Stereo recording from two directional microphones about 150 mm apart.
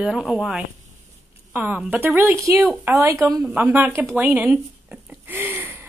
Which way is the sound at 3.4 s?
5° right (ahead or behind).